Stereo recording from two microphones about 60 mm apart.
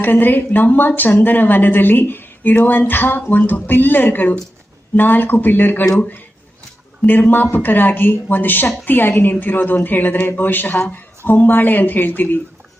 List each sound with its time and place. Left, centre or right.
0.0 s a woman's voice: left